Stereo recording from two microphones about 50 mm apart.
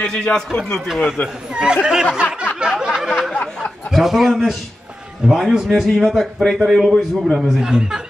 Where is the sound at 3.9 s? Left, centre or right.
Centre.